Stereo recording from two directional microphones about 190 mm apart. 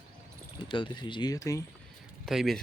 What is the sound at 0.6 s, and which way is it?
Speech, 25° left (ahead or behind).